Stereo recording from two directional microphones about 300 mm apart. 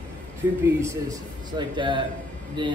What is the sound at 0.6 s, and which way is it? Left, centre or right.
Speech, centre.